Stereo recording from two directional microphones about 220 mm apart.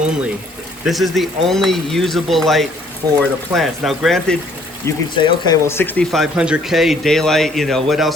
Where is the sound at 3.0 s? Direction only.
15° right (ahead or behind).